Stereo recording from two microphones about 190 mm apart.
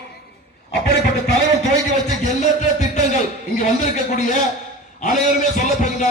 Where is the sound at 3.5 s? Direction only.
45° left (ahead or behind).